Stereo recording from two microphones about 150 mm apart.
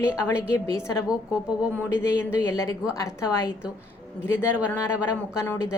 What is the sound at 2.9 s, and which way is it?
Speech, 20° left (ahead or behind).